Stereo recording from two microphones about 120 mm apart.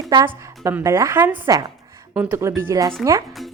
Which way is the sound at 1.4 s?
30° right (ahead or behind).